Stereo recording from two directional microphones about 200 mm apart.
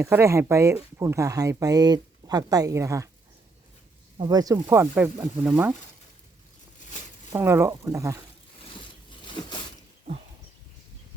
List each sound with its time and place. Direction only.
0.0 s speech: 15° right (ahead or behind)
4.2 s speech: 20° right (ahead or behind)
7.3 s speech: 10° right (ahead or behind)
9.2 s zipper: 25° left (ahead or behind)